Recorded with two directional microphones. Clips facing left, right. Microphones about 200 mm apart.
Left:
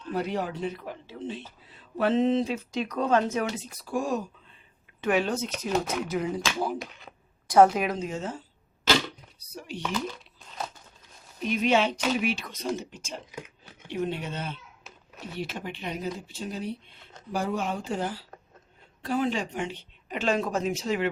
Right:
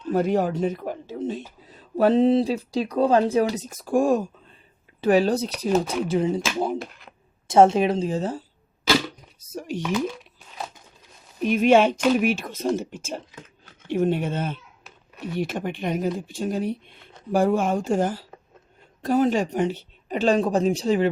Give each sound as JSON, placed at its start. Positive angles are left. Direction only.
{"t": 0.1, "sound": "speech", "side_deg": -45}
{"t": 4.9, "sound": "a woman's voice", "side_deg": -35}
{"t": 7.4, "sound": "a woman's voice", "side_deg": -25}
{"t": 9.5, "sound": "a sound", "side_deg": -45}
{"t": 9.8, "sound": "crumpling", "side_deg": -10}
{"t": 11.3, "sound": "speech", "side_deg": -50}